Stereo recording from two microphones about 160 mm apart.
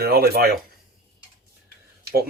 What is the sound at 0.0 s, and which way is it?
Speech, 70° right (ahead or behind).